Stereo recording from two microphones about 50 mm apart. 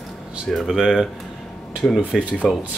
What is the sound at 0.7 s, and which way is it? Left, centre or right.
Speech, centre.